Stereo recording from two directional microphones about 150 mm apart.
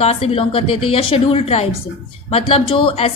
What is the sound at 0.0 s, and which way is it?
A woman's voice, 40° left (ahead or behind).